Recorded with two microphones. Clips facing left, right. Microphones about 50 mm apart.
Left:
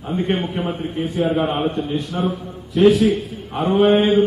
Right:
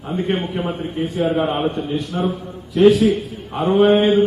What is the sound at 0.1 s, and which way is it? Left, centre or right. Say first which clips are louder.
A man's voice: even; centre.